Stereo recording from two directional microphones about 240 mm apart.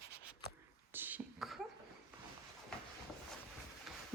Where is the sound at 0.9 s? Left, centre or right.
Centre.